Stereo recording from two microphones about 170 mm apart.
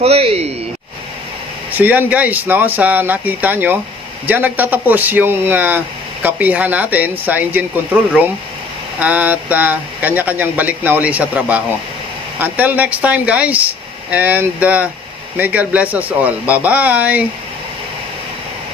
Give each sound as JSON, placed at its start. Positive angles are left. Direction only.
{"t": 0.0, "sound": "speech", "side_deg": -35}
{"t": 1.7, "sound": "speech", "side_deg": -10}